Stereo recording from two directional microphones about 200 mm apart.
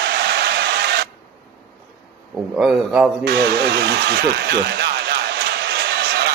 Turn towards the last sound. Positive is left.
turn(degrees=-55)  # may be behind; listen again after turning